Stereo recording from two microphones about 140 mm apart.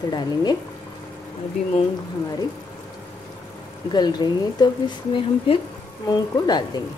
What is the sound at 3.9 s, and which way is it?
Speech, 30° left (ahead or behind).